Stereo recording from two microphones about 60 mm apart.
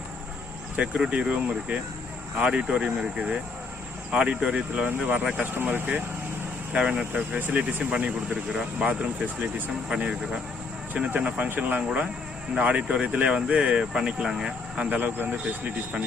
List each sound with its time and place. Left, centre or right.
0.8 s speech: right
6.7 s speech: centre
12.5 s speech: centre
14.8 s speech: right